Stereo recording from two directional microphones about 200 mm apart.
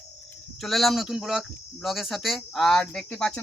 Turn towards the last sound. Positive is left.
turn(degrees=5)  # may be behind; listen again after turning